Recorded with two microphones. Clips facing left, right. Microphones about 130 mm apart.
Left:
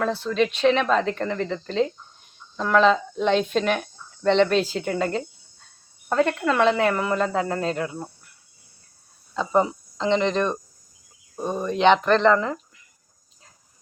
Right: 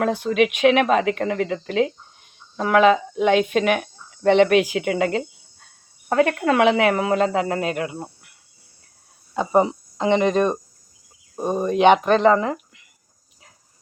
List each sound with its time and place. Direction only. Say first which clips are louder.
0.3 s speech: right 3 dB; 65° right (ahead or behind)
2.6 s speech: right 3 dB; 60° right (ahead or behind)
4.6 s speech: right 4 dB; 15° right (ahead or behind)
4.9 s a sound: right 3 dB; 75° right (ahead or behind)
6.1 s speech: right 3 dB; 65° right (ahead or behind)
7.7 s speech: right 1 dB; 10° right (ahead or behind)
9.3 s speech: right 3 dB; 15° right (ahead or behind)